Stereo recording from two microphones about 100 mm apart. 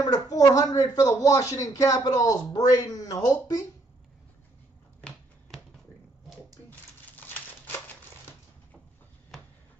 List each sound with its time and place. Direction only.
0.0 s speech: 40° left (ahead or behind)
5.0 s finger snapping: 10° left (ahead or behind)
6.7 s crumpling: 20° left (ahead or behind)